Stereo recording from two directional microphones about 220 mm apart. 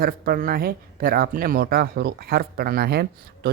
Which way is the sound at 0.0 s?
40° right (ahead or behind).